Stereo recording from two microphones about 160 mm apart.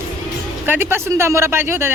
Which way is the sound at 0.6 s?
15° right (ahead or behind).